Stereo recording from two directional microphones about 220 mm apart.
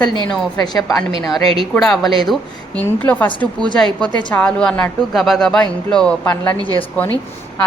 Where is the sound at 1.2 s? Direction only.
Centre (ahead or behind).